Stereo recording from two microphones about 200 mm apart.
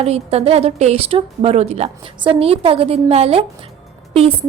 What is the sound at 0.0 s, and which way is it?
A woman's voice, 30° right (ahead or behind).